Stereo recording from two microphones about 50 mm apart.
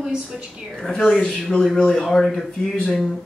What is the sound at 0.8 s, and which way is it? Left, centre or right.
Speech, centre.